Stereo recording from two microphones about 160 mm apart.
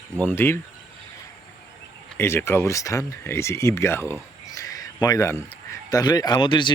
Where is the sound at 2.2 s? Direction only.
15° left (ahead or behind).